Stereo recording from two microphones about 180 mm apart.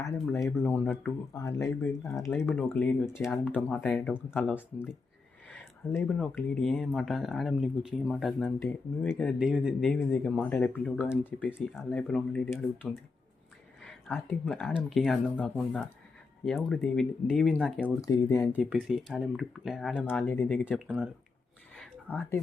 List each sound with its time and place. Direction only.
0.6 s speech: 15° left (ahead or behind); by 4.6 s 5° right (ahead or behind)
5.5 s speech: 10° left (ahead or behind)
9.4 s speech: 5° right (ahead or behind); by 13.0 s 15° left (ahead or behind)
13.8 s speech: centre (ahead or behind)
17.7 s speech: 15° left (ahead or behind)
18.5 s speech: 5° right (ahead or behind)
20.1 s speech: 10° left (ahead or behind)
20.7 s speech: 5° right (ahead or behind)
21.8 s a sound: 10° left (ahead or behind)